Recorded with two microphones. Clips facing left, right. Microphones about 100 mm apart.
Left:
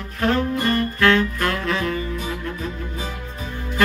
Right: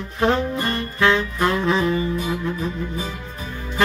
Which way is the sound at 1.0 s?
10° right (ahead or behind).